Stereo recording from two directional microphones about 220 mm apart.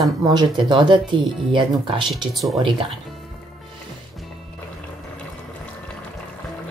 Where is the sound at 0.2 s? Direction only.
20° right (ahead or behind).